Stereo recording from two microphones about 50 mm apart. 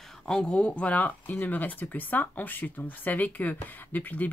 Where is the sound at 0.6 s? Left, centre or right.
Left.